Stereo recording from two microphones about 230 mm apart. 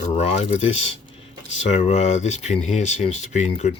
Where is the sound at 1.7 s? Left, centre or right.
Left.